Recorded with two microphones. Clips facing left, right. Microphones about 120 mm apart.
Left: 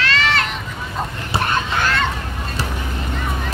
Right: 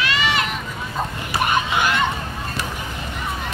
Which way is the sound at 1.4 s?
15° right (ahead or behind).